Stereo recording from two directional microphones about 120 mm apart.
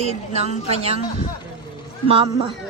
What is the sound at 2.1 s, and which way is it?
Speech, 50° right (ahead or behind).